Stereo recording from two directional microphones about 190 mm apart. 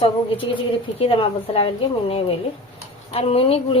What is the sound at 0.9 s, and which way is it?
Speech, 30° left (ahead or behind).